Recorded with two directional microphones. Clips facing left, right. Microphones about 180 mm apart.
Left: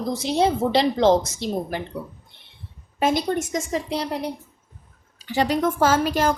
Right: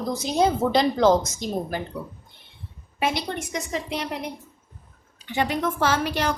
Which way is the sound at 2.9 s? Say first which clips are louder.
Left 5 dB; 45° left (ahead or behind).